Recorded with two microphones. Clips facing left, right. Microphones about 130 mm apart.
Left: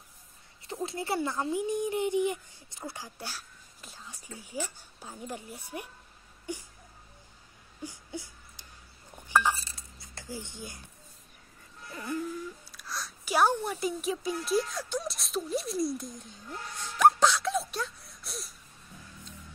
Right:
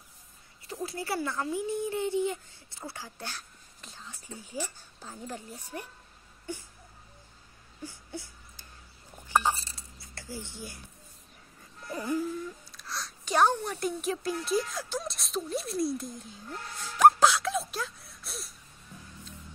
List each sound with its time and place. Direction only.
0.7 s speech: 25° left (ahead or behind)
7.8 s a sound: 15° left (ahead or behind)
9.3 s chink: 20° right (ahead or behind)
9.7 s dishes: 20° left (ahead or behind)
12.2 s speech: centre (ahead or behind)
16.7 s gasp: 5° right (ahead or behind)